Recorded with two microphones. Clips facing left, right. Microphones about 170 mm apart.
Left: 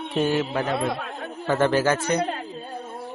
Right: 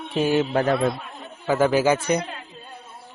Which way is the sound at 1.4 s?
10° right (ahead or behind).